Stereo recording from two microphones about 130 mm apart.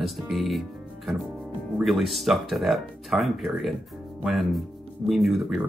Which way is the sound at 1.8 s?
Centre (ahead or behind).